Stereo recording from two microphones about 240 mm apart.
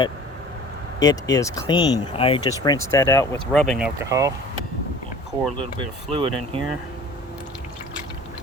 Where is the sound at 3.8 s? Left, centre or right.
Centre.